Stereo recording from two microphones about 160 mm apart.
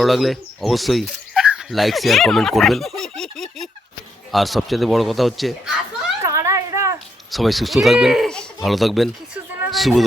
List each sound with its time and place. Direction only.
0.0 s a man's voice: centre (ahead or behind)
6.2 s a sound: 20° right (ahead or behind)
7.3 s speech: centre (ahead or behind)